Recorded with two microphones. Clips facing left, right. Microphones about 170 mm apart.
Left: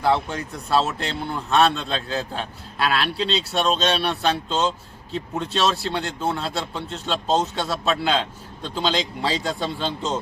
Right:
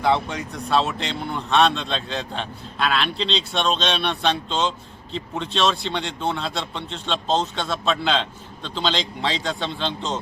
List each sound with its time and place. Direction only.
0.0 s a man's voice: centre (ahead or behind)